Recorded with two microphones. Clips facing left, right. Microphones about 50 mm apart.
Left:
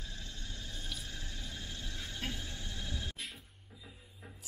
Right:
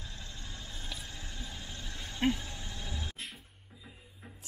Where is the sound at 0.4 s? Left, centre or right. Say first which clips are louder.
Right 1 dB; right.